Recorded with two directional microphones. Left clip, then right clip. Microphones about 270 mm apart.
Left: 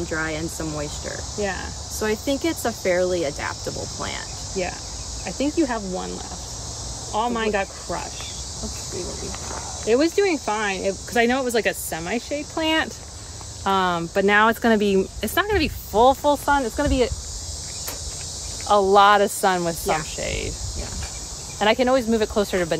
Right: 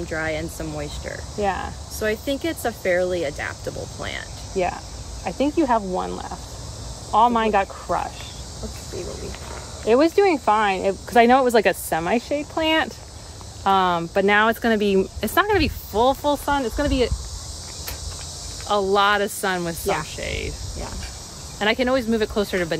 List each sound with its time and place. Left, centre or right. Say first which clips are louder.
0.0 s cricket: even; centre
1.4 s speech: right 4 dB; centre
2.0 s cricket: even; centre
4.6 s speech: right 4 dB; centre
9.8 s speech: right 3 dB; centre
12.5 s speech: right 1 dB; centre
15.9 s speech: left 3 dB; centre
18.7 s cricket: left 4 dB; centre
21.5 s speech: left 2 dB; centre